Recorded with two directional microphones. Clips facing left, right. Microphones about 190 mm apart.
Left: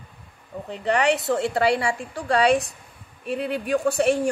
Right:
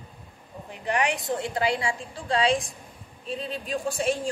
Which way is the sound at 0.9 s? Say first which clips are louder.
Left 5 dB; 70° left (ahead or behind).